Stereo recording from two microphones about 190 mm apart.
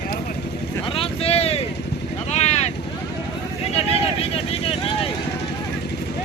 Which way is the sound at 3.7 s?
30° left (ahead or behind).